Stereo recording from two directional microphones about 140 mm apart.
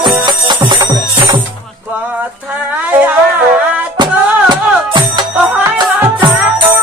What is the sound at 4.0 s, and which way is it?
Music, 35° right (ahead or behind).